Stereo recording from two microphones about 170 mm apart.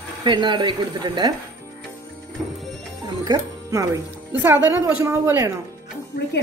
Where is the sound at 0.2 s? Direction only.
25° right (ahead or behind).